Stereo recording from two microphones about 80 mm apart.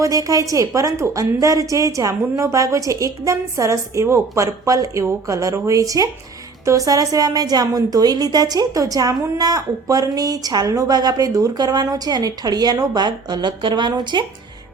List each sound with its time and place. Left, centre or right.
0.0 s a woman's voice: right